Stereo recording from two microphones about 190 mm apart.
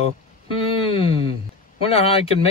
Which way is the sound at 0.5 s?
30° left (ahead or behind).